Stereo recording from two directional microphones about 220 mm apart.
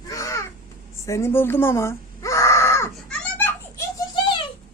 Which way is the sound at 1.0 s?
10° left (ahead or behind).